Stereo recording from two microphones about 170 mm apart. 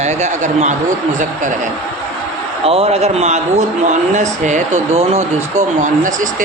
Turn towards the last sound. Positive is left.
turn(degrees=-45)  # may be behind; listen again after turning